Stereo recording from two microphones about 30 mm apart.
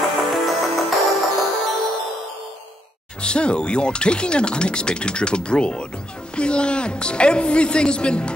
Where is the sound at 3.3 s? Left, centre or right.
Left.